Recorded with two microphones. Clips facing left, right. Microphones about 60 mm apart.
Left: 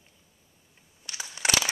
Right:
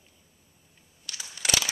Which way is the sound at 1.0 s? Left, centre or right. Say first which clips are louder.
Left 3 dB; left.